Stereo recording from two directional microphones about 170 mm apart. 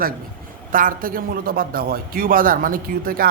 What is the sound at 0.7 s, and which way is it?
A man's voice, 55° right (ahead or behind).